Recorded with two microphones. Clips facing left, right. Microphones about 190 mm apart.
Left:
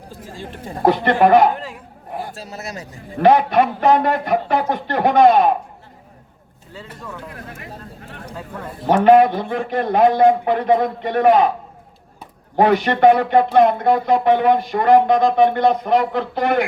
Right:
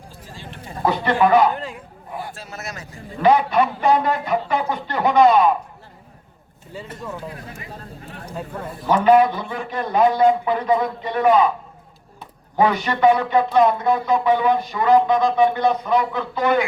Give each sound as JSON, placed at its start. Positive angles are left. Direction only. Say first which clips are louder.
{"t": 0.1, "sound": "a sound", "louder": "left 7 dB", "side_deg": 50}
{"t": 1.5, "sound": "a sound", "louder": "right 1 dB", "side_deg": 0}
{"t": 2.1, "sound": "a man's voice", "louder": "left 3 dB", "side_deg": 35}
{"t": 3.2, "sound": "speech", "louder": "left 3 dB", "side_deg": 55}
{"t": 6.8, "sound": "speech", "louder": "right 2 dB", "side_deg": -20}
{"t": 7.3, "sound": "speech", "louder": "left 2 dB", "side_deg": 55}
{"t": 8.9, "sound": "speech", "louder": "left 3 dB", "side_deg": 55}
{"t": 12.5, "sound": "speech", "louder": "left 4 dB", "side_deg": 55}